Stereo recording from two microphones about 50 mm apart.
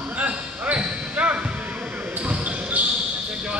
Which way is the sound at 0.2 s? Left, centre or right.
Right.